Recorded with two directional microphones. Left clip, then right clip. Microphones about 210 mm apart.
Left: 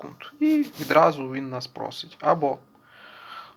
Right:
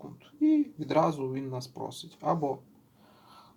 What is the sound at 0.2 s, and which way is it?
Speech, centre (ahead or behind).